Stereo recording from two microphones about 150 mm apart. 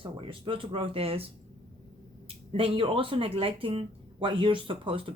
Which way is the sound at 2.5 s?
40° right (ahead or behind).